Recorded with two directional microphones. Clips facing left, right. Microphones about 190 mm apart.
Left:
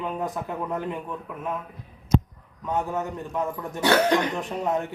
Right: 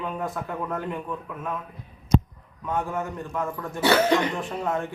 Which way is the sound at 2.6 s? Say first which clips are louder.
Left 1 dB; 20° left (ahead or behind).